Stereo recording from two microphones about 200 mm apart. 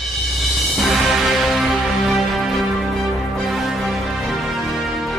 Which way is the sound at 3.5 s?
Centre (ahead or behind).